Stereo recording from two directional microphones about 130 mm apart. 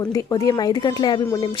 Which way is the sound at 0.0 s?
25° left (ahead or behind).